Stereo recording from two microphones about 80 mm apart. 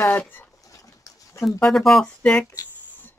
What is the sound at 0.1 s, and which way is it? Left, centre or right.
Speech, left.